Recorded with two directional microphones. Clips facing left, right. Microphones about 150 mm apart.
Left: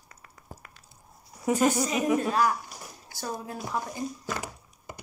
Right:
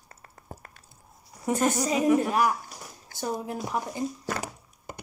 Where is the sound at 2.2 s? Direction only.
15° right (ahead or behind).